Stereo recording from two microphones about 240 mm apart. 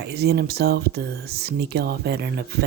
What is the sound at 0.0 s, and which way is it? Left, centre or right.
Speech, right.